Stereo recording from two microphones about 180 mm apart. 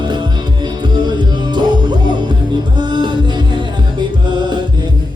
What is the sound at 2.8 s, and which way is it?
Music, 25° right (ahead or behind).